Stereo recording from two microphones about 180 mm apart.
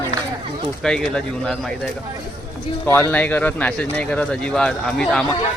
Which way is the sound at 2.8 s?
15° left (ahead or behind).